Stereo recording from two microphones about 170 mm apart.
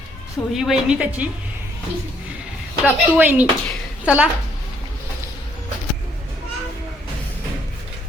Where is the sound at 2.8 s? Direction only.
10° right (ahead or behind).